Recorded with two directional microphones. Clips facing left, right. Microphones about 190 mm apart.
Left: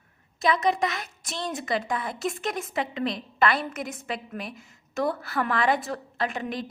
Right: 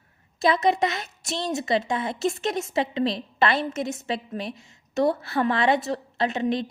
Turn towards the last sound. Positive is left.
turn(degrees=-25)  # may be behind; listen again after turning